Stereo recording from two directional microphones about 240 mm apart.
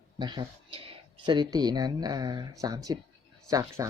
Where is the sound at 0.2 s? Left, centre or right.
Centre.